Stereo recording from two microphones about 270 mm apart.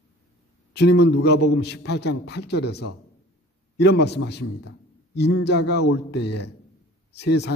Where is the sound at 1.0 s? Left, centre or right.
Left.